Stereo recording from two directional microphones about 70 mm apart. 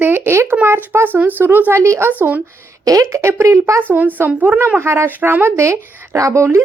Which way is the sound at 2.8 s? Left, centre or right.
Right.